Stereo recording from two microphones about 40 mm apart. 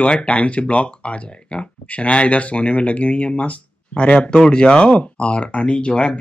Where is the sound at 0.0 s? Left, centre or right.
Left.